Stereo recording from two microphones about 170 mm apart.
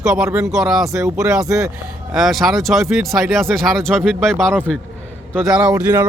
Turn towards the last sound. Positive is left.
turn(degrees=-20)  # may be behind; listen again after turning